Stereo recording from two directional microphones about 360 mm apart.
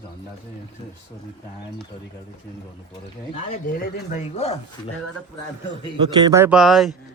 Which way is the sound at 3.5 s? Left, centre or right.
Left.